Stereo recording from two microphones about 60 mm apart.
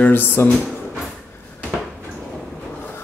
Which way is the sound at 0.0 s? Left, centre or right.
Left.